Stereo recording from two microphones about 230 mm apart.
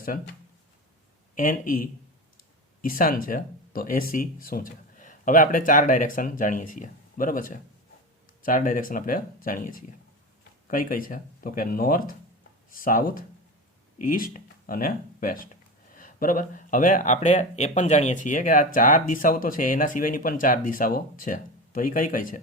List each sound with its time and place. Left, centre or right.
1.4 s speech: left